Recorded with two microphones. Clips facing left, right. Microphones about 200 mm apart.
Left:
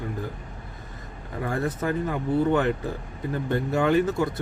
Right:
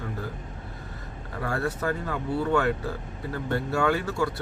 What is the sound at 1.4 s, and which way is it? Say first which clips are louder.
Speech: left 1 dB; 20° left (ahead or behind).